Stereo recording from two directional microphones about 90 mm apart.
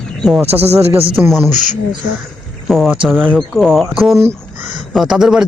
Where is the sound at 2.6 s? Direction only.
Centre (ahead or behind).